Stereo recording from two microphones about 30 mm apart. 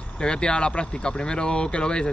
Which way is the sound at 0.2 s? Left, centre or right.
Left.